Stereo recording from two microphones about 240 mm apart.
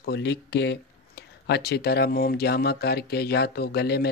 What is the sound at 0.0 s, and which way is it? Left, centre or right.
Speech, left.